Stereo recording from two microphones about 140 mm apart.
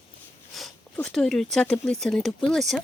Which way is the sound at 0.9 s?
5° left (ahead or behind).